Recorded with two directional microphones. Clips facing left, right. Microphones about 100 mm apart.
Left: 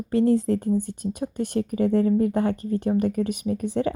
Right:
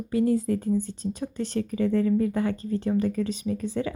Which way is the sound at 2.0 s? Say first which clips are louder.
Left 3 dB; 25° left (ahead or behind).